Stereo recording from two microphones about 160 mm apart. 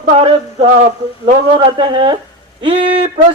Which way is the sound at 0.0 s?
35° right (ahead or behind).